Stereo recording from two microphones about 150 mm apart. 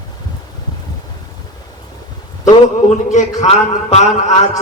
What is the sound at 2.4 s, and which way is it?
A man's voice, 50° left (ahead or behind).